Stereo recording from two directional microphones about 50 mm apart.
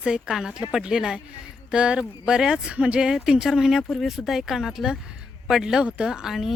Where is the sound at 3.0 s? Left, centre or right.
Centre.